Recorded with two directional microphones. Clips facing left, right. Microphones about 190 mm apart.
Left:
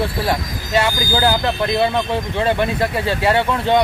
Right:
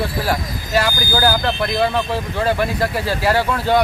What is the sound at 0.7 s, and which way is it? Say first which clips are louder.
Speech: left 1 dB; 25° left (ahead or behind).